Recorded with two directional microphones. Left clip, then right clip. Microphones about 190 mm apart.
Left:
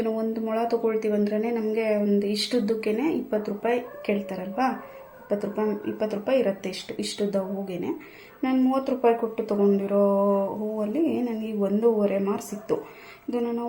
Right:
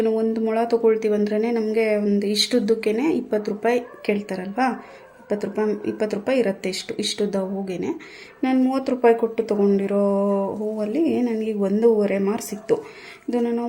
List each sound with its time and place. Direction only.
0.0 s speech: 40° right (ahead or behind)